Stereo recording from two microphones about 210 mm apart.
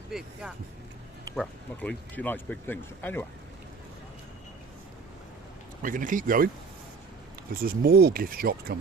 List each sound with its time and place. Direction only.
0.1 s speech: centre (ahead or behind)
5.8 s speech: 40° right (ahead or behind)
7.5 s speech: 45° right (ahead or behind)